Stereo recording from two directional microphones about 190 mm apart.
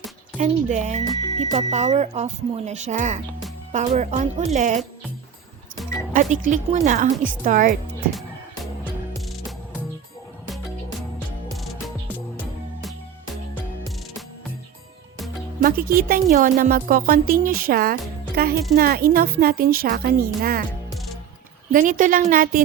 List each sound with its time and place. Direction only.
0.3 s speech: 40° right (ahead or behind)
6.1 s speech: 40° right (ahead or behind)
11.5 s music: centre (ahead or behind)
15.6 s speech: 50° right (ahead or behind)
21.7 s speech: 45° right (ahead or behind)